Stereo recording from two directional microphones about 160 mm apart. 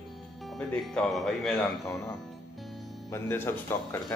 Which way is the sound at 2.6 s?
Centre (ahead or behind).